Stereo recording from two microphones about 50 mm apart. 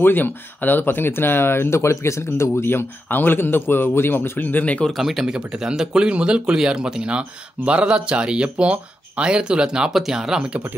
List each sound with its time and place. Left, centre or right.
0.0 s speech: left
2.6 s speech: left
4.9 s speech: centre
5.3 s speech: centre